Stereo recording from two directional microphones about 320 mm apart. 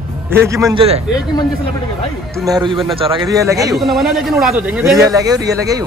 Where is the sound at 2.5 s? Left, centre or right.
Centre.